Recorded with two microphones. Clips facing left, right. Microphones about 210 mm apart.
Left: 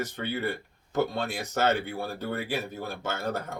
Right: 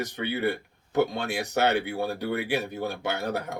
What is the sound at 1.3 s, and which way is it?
Speech, 65° right (ahead or behind).